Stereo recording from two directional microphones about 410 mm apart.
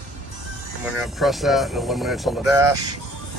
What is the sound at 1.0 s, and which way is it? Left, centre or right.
Speech, centre.